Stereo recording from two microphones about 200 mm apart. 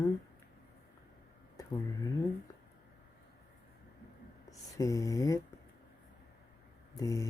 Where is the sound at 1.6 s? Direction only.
15° left (ahead or behind).